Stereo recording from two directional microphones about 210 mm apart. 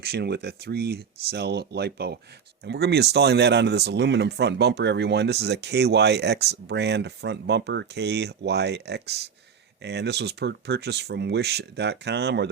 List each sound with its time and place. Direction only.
0.0 s speech: 50° right (ahead or behind)